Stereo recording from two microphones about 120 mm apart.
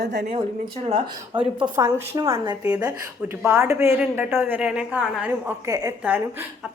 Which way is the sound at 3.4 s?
20° right (ahead or behind).